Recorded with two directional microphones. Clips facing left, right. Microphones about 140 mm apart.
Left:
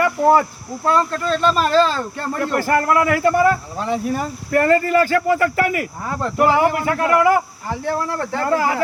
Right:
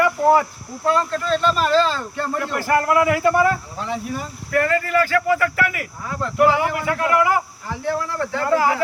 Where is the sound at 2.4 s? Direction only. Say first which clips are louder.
Left 2 dB; 50° left (ahead or behind).